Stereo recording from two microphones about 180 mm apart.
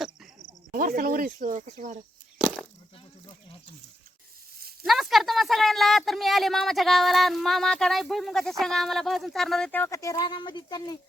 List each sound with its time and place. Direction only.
0.7 s speech: 50° right (ahead or behind)
4.8 s a woman's voice: centre (ahead or behind); by 10.9 s 25° left (ahead or behind)